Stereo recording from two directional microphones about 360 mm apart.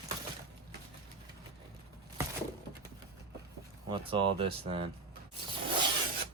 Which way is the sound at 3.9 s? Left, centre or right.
Centre.